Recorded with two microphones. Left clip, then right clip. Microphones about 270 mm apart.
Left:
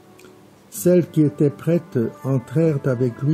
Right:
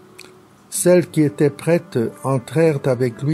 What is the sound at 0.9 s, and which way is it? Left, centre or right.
Speech, right.